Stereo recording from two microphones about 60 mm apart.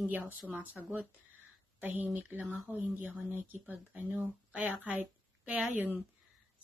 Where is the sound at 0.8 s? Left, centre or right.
Centre.